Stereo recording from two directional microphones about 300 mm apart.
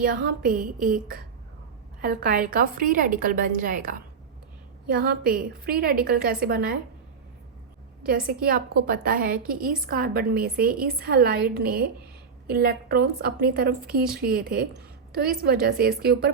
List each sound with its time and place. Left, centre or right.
0.0 s a woman's voice: right
8.0 s a woman's voice: right